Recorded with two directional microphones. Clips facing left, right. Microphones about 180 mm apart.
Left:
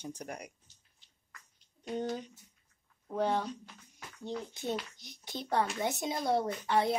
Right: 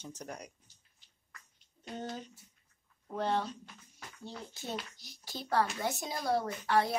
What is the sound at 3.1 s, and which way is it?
Speech, 10° left (ahead or behind).